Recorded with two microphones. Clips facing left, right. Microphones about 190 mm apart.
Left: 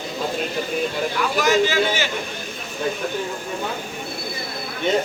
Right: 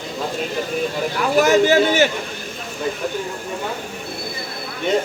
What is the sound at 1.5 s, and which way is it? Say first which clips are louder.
Speech: right 3 dB; 40° right (ahead or behind).